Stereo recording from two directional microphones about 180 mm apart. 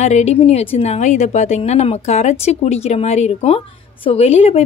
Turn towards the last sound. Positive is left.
turn(degrees=35)  # may be behind; listen again after turning